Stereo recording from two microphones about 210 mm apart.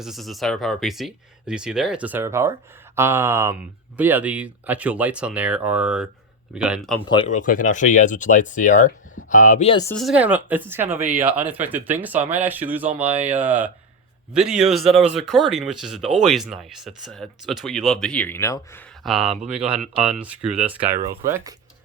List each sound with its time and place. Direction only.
0.0 s speech: centre (ahead or behind)
7.1 s speech: 30° left (ahead or behind)
9.9 s speech: centre (ahead or behind)
19.0 s speech: centre (ahead or behind)